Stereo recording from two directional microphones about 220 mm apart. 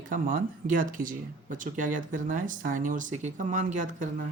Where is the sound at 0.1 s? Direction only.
40° right (ahead or behind).